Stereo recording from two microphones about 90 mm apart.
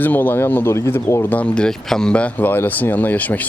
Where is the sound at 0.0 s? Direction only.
20° left (ahead or behind).